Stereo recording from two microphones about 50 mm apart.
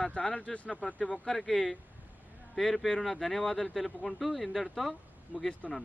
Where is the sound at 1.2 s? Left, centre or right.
Centre.